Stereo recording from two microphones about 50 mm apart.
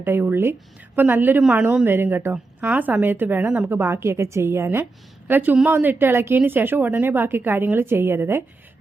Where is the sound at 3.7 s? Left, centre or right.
Right.